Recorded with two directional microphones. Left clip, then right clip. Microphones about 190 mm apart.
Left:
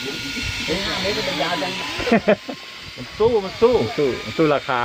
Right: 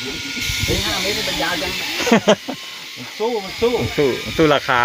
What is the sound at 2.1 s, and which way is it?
Speech, 35° right (ahead or behind).